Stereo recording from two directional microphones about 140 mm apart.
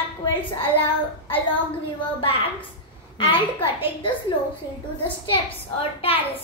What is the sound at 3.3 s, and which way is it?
Speech, 40° left (ahead or behind).